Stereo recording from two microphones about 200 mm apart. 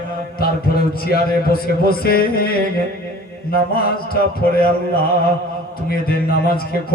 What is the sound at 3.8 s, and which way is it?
A man's voice, 50° left (ahead or behind).